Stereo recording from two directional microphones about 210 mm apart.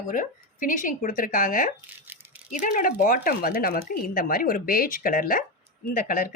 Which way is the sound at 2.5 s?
35° left (ahead or behind).